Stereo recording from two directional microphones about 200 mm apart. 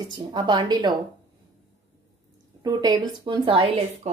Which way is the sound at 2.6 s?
20° right (ahead or behind).